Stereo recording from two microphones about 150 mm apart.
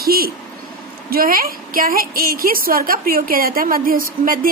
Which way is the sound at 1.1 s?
75° right (ahead or behind).